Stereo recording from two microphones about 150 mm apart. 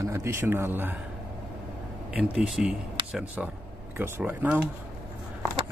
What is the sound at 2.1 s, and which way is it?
Speech, 5° right (ahead or behind).